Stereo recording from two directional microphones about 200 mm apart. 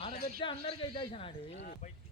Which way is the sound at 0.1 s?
45° left (ahead or behind).